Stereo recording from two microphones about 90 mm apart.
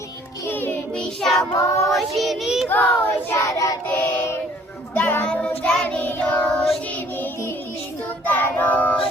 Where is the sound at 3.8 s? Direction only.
20° left (ahead or behind).